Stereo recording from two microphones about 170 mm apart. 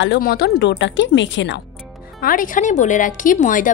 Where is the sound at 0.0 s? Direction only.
75° left (ahead or behind); by 1.6 s 90° left.